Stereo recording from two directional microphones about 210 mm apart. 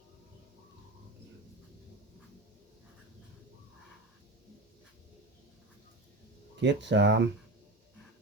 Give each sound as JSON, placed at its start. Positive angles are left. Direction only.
{"t": 6.6, "sound": "speech", "side_deg": -55}